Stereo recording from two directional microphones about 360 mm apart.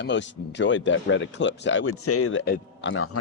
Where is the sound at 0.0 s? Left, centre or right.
Left.